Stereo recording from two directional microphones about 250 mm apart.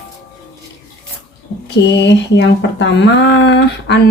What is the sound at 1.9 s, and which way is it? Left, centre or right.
Speech, left.